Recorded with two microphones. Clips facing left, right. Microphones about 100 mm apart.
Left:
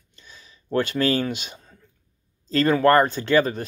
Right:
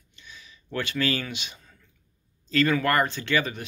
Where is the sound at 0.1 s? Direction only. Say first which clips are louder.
Even; 40° left (ahead or behind).